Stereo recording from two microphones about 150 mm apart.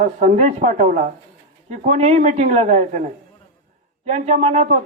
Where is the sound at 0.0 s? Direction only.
55° right (ahead or behind).